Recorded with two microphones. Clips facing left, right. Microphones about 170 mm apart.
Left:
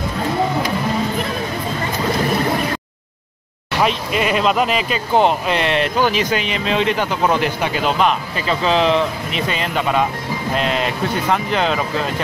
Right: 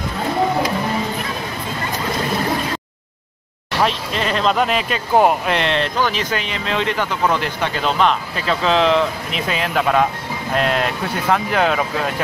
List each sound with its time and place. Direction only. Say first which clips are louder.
3.8 s speech: left 2 dB; 10° left (ahead or behind)